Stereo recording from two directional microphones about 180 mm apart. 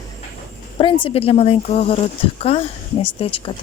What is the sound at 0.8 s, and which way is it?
Speech, 30° left (ahead or behind).